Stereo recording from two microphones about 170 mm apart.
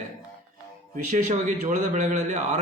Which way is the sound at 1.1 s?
50° right (ahead or behind).